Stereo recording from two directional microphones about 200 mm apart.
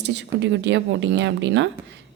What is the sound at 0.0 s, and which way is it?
A woman's voice, 60° right (ahead or behind).